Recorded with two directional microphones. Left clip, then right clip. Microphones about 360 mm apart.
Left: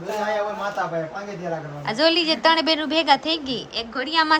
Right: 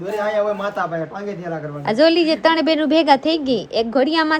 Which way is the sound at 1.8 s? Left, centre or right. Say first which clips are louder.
Right 5 dB; centre.